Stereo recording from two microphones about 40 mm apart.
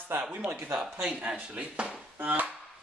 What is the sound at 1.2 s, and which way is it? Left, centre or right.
Speech, right.